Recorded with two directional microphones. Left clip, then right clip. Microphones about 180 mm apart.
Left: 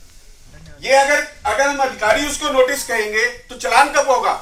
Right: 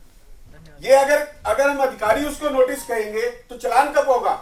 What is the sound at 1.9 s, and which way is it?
Speech, 55° right (ahead or behind).